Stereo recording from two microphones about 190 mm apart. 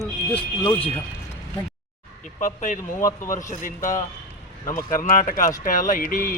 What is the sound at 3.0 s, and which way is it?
Speech, 15° left (ahead or behind).